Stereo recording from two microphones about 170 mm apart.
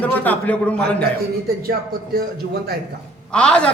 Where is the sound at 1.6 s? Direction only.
60° right (ahead or behind).